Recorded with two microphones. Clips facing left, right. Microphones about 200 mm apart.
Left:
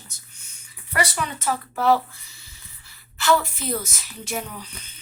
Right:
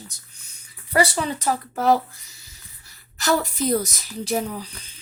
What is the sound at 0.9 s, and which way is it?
Speech, 30° right (ahead or behind).